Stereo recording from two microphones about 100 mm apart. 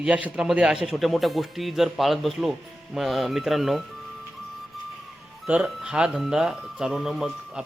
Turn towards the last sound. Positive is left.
turn(degrees=-5)  # may be behind; listen again after turning